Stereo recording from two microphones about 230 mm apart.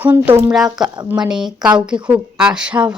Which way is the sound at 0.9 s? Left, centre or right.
Centre.